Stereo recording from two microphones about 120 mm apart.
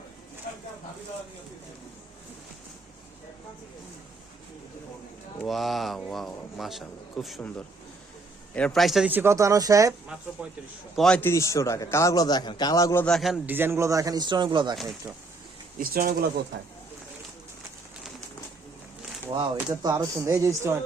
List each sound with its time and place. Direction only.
5.4 s speech: centre (ahead or behind)
8.5 s speech: 5° left (ahead or behind)
9.0 s speech: 20° right (ahead or behind)
10.9 s speech: 5° left (ahead or behind)
11.2 s a man's voice: 20° left (ahead or behind)
13.0 s speech: 5° left (ahead or behind)
13.4 s speech: 15° right (ahead or behind); by 14.8 s 40° right (ahead or behind)
14.8 s speech: centre (ahead or behind)
19.3 s speech: 40° right (ahead or behind); by 20.7 s 25° right (ahead or behind)